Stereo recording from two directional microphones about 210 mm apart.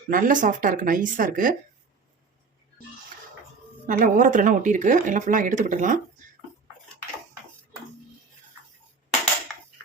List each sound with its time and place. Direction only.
0.1 s speech: 40° right (ahead or behind)
3.8 s speech: 40° right (ahead or behind)